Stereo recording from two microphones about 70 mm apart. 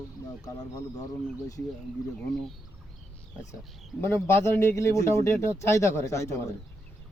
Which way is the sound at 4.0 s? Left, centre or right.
Left.